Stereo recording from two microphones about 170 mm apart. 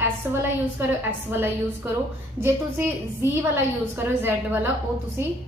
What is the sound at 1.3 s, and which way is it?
Speech, 15° right (ahead or behind).